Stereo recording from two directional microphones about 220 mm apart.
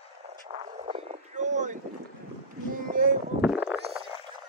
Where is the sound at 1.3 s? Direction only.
35° right (ahead or behind).